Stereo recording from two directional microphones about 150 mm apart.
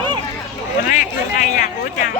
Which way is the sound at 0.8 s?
55° left (ahead or behind).